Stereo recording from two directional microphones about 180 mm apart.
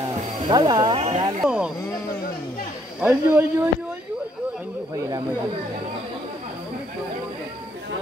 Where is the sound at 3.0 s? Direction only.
10° right (ahead or behind).